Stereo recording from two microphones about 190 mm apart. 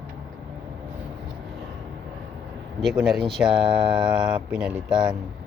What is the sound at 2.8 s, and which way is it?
Speech, centre (ahead or behind).